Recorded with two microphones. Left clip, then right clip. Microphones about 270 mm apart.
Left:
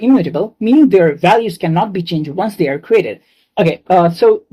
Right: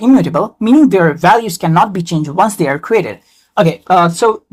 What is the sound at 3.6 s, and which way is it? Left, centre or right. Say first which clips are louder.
Speech: right 1 dB; right.